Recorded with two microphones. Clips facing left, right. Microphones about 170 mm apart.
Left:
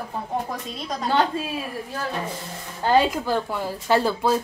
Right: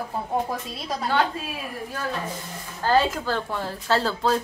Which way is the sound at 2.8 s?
15° left (ahead or behind).